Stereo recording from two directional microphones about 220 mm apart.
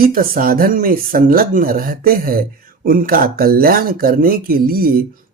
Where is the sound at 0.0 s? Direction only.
40° right (ahead or behind).